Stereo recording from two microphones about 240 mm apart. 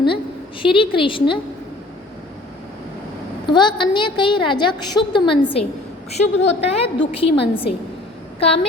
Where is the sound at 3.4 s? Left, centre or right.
Centre.